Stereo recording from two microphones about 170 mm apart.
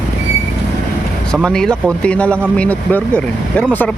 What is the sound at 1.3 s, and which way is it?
Speech, 5° left (ahead or behind).